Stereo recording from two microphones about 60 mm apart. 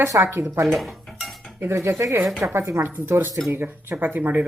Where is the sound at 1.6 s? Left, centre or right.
Right.